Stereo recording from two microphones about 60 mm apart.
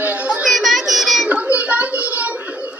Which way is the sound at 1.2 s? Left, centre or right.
Right.